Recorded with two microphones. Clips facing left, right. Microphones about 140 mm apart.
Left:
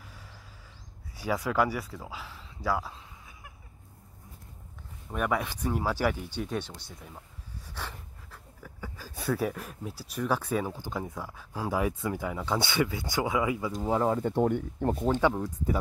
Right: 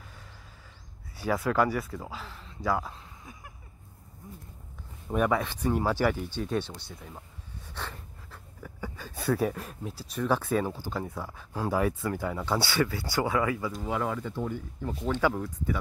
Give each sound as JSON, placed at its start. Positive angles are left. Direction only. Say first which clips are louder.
{"t": 1.1, "sound": "speech", "louder": "right 1 dB", "side_deg": 10}
{"t": 5.1, "sound": "speech", "louder": "right 3 dB", "side_deg": 0}
{"t": 7.7, "sound": "a sound", "louder": "right 1 dB", "side_deg": 10}
{"t": 9.3, "sound": "speech", "louder": "right 2 dB", "side_deg": -5}
{"t": 13.7, "sound": "speech", "louder": "left 4 dB", "side_deg": 35}
{"t": 14.2, "sound": "speech", "louder": "left 7 dB", "side_deg": 60}
{"t": 15.1, "sound": "speech", "louder": "left 1 dB", "side_deg": 15}
{"t": 15.4, "sound": "speech", "louder": "left 2 dB", "side_deg": 35}